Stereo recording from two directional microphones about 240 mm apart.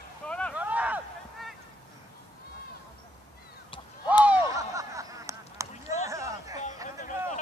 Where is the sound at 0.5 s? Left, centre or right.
Centre.